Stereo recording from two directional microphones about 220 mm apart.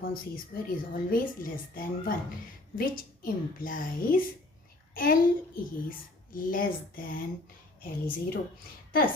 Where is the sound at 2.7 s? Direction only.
40° left (ahead or behind).